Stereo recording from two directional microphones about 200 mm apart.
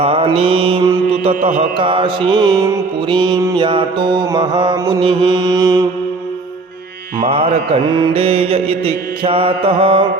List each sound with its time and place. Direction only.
0.0 s mantra: 25° right (ahead or behind)
7.2 s mantra: 30° right (ahead or behind)